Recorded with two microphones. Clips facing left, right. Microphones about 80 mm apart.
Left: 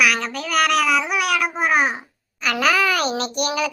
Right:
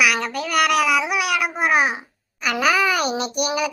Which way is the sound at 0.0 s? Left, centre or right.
Centre.